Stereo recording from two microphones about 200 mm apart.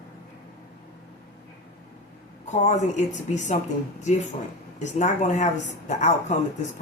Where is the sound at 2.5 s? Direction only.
35° left (ahead or behind).